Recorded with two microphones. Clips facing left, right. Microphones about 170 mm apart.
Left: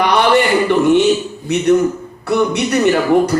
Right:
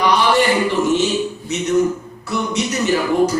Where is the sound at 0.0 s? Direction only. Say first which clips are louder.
Left 3 dB; 60° left (ahead or behind).